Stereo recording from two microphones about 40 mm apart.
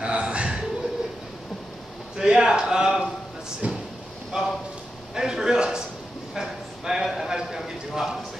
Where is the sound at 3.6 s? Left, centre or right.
Right.